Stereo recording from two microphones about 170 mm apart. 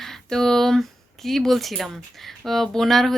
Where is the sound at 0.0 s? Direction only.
Centre (ahead or behind).